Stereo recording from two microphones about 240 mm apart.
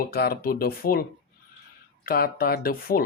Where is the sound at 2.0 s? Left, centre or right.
Left.